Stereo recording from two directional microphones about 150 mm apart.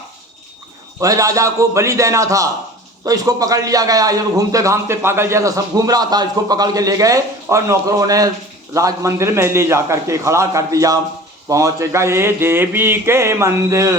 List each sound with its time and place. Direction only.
0.9 s a man's voice: 20° right (ahead or behind)